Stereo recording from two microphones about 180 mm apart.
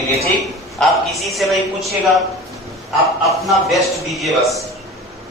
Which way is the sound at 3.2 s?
Centre (ahead or behind).